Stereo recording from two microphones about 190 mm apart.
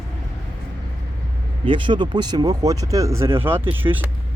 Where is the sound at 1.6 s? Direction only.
25° right (ahead or behind).